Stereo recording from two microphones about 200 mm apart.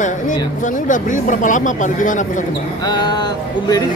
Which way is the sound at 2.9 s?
20° left (ahead or behind).